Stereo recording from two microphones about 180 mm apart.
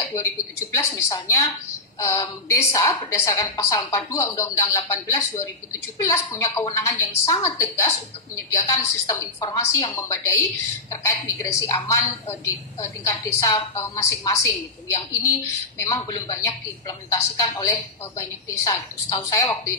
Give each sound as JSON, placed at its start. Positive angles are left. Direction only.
{"t": 0.0, "sound": "a woman's voice", "side_deg": 20}
{"t": 15.8, "sound": "speech", "side_deg": 20}